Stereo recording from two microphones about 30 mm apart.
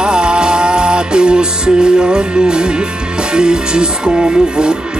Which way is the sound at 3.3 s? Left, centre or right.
Right.